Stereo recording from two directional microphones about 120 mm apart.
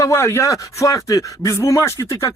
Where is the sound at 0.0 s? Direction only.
25° left (ahead or behind).